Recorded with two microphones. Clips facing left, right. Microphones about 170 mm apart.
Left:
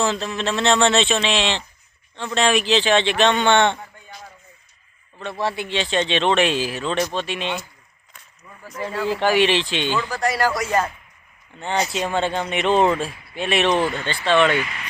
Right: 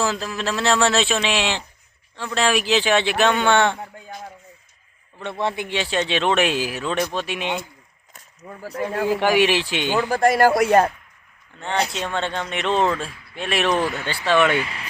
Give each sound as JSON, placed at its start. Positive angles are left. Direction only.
{"t": 0.0, "sound": "speech", "side_deg": -5}
{"t": 5.2, "sound": "a man's voice", "side_deg": -20}
{"t": 8.1, "sound": "a sound", "side_deg": -45}
{"t": 9.0, "sound": "a man's voice", "side_deg": -15}
{"t": 10.1, "sound": "speech", "side_deg": -50}
{"t": 11.9, "sound": "a man's voice", "side_deg": 5}
{"t": 14.6, "sound": "speech", "side_deg": -30}